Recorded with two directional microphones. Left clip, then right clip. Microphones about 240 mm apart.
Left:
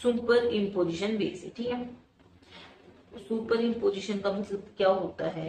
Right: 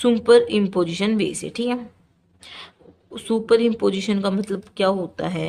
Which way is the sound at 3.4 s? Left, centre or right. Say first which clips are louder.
Right 9 dB; right.